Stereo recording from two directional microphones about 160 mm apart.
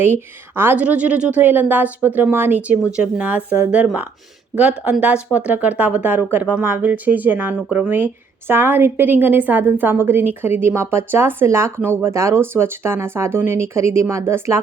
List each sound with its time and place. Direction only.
0.0 s speech: 15° right (ahead or behind)